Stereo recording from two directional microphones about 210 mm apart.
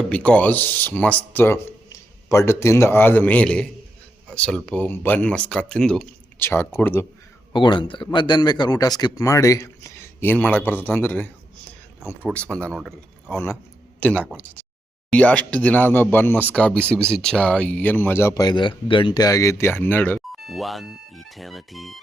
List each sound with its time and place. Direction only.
0.1 s speech: 5° left (ahead or behind)
7.5 s speech: 20° left (ahead or behind); by 13.3 s centre (ahead or behind)
13.3 s speech: 10° left (ahead or behind)